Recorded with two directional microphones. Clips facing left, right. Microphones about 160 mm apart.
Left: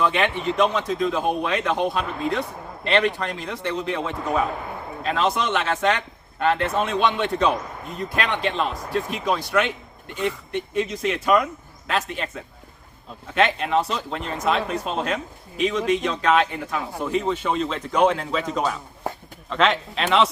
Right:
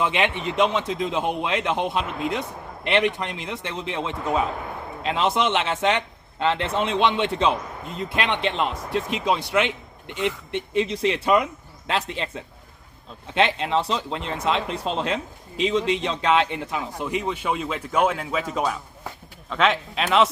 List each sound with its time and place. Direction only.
0.0 s a man's voice: 20° right (ahead or behind); by 20.3 s centre (ahead or behind)